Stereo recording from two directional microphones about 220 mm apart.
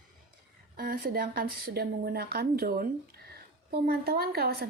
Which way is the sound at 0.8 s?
40° right (ahead or behind).